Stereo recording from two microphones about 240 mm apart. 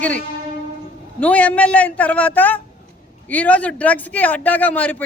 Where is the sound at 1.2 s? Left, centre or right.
Centre.